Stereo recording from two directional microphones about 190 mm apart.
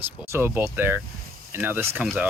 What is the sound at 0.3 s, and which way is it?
Speech, 10° right (ahead or behind).